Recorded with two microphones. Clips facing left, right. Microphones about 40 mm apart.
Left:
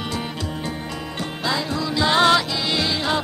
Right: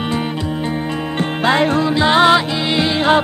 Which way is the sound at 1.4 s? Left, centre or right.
Right.